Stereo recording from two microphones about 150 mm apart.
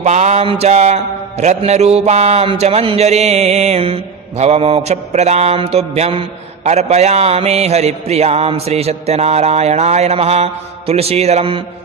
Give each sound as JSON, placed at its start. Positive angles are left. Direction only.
{"t": 0.0, "sound": "mantra", "side_deg": -50}